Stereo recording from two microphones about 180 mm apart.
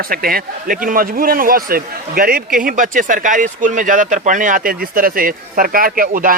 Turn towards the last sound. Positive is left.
turn(degrees=-50)  # may be behind; listen again after turning